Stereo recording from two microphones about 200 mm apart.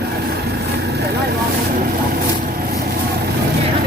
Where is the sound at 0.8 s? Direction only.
55° right (ahead or behind).